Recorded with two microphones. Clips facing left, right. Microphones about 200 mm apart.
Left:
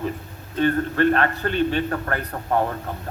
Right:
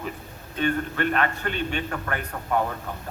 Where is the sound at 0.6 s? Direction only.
35° left (ahead or behind).